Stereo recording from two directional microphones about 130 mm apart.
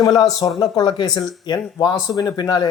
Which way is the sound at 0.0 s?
30° left (ahead or behind).